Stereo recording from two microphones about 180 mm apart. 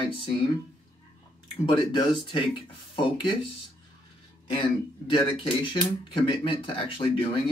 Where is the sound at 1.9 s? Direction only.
30° left (ahead or behind).